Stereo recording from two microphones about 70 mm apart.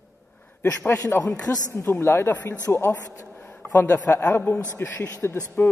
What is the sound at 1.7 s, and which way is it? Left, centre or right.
Speech, left.